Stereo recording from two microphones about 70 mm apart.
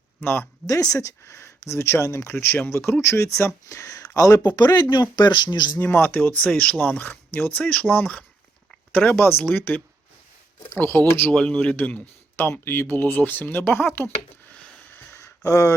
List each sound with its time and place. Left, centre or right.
0.2 s speech: left
0.7 s speech: left
4.5 s speech: left
5.8 s speech: left
10.8 s speech: left
11.3 s speech: centre
12.4 s speech: left
14.9 s a sound: left